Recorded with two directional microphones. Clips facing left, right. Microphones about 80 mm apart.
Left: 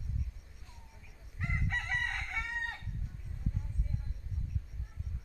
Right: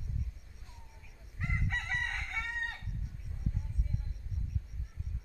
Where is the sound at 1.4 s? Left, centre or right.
Centre.